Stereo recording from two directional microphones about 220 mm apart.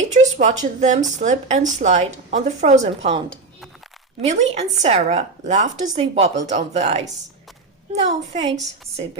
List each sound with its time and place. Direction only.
0.1 s a woman's voice: 35° right (ahead or behind)